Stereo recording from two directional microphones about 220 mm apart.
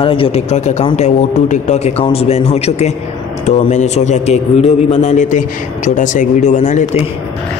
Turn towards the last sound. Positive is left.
turn(degrees=35)  # may be behind; listen again after turning